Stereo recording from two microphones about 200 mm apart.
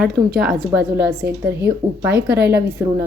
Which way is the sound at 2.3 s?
55° right (ahead or behind).